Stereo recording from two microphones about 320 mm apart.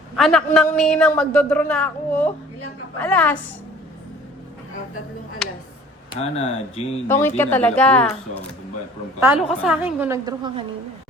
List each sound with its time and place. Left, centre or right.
0.2 s a man's voice: centre
6.1 s speech: centre
7.1 s a man's voice: centre
9.6 s a man's voice: centre